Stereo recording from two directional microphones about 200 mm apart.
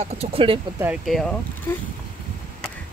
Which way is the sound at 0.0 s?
30° right (ahead or behind).